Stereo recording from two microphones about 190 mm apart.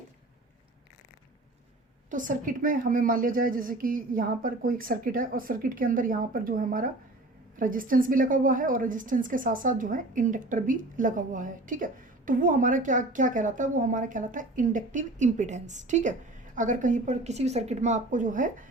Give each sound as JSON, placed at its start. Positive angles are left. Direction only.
{"t": 2.0, "sound": "a woman's voice", "side_deg": -45}